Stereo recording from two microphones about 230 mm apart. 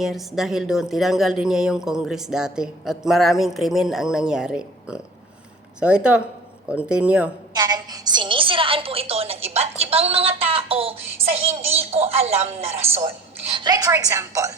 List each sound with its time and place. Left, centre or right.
0.0 s a woman's voice: centre
7.5 s a woman's voice: centre